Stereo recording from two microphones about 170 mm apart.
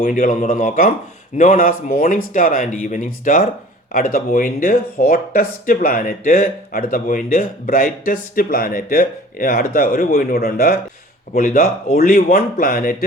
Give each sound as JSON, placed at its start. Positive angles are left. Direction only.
{"t": 0.0, "sound": "speech", "side_deg": 50}